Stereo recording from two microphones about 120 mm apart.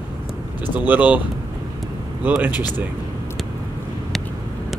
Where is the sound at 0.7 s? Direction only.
15° right (ahead or behind).